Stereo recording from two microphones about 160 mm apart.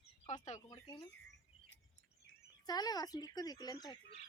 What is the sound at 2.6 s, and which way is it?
Speech, 25° left (ahead or behind).